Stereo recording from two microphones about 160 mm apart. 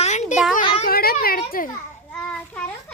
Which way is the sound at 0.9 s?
70° left (ahead or behind).